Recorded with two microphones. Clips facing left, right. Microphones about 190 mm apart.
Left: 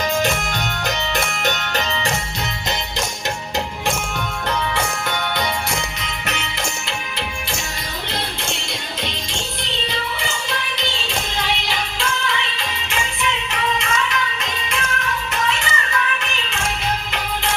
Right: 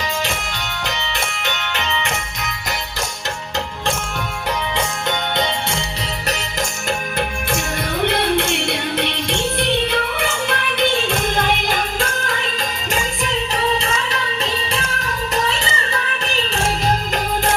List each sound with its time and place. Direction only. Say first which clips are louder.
0.9 s music: left 3 dB; 45° left (ahead or behind)
4.7 s music: right 1 dB; 20° right (ahead or behind)
6.2 s music: right 2 dB; 40° right (ahead or behind)
8.0 s music: right 11 dB; 60° right (ahead or behind); by 16.6 s 35° right (ahead or behind)